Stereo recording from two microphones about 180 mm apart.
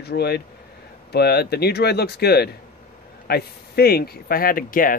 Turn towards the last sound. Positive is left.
turn(degrees=50)  # may be behind; listen again after turning